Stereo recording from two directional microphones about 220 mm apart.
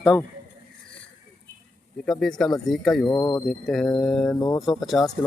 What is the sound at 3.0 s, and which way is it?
Speech, 15° left (ahead or behind).